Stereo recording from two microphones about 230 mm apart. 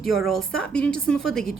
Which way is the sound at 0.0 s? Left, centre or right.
Centre.